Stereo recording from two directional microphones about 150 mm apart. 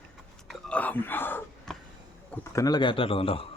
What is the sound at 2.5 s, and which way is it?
Speech, 25° left (ahead or behind).